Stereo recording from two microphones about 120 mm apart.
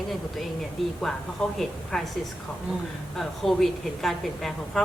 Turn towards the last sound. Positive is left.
turn(degrees=0)  # may be behind; listen again after turning